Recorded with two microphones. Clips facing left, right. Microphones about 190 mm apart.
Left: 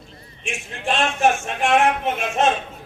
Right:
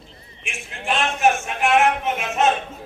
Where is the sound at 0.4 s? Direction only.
35° left (ahead or behind).